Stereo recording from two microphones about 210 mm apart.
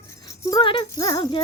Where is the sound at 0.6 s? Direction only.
25° left (ahead or behind).